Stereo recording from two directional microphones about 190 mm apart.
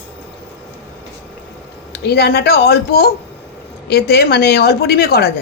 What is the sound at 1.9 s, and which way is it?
A woman's voice, 60° left (ahead or behind).